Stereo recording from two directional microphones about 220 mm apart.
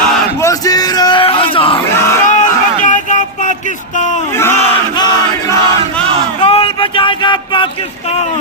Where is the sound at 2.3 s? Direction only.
35° left (ahead or behind).